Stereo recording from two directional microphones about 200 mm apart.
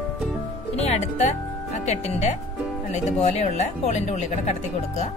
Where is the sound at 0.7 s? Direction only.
30° left (ahead or behind).